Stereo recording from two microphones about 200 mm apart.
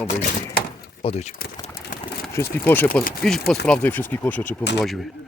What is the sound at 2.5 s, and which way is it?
Speech, 10° left (ahead or behind).